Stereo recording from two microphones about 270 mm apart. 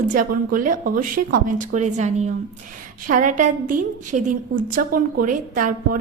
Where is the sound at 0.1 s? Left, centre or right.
Right.